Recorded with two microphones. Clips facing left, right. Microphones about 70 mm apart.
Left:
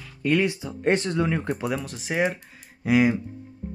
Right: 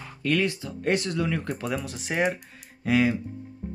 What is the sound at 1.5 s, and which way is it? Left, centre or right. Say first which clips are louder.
Speech: left 2 dB; centre.